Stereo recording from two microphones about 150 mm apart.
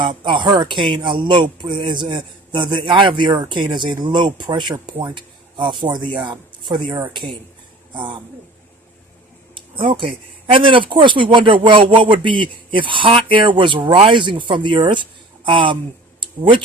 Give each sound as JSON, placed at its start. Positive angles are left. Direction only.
{"t": 0.0, "sound": "speech", "side_deg": -30}
{"t": 9.7, "sound": "speech", "side_deg": -35}